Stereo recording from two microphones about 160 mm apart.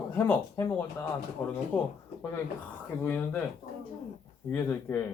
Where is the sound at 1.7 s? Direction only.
10° left (ahead or behind).